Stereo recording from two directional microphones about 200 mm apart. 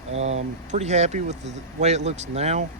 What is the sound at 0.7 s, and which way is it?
Speech, 35° right (ahead or behind).